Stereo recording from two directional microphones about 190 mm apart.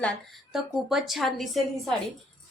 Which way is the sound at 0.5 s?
Centre (ahead or behind).